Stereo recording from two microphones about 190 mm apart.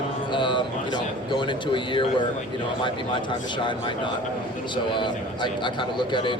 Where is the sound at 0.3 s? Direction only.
25° left (ahead or behind).